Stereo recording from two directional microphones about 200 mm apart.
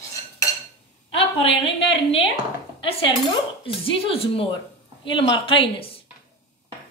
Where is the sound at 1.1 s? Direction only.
25° left (ahead or behind).